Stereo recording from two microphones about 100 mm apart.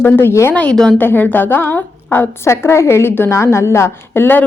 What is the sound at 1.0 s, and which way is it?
A woman's voice, 20° left (ahead or behind).